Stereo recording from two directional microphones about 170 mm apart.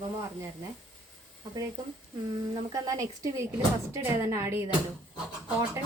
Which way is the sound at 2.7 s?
20° right (ahead or behind).